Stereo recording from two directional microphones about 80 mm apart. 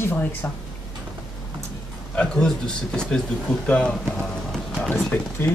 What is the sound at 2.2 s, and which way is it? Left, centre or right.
Speech, centre.